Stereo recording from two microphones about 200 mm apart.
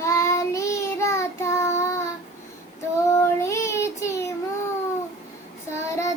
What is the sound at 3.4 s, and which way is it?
Child singing, 15° left (ahead or behind).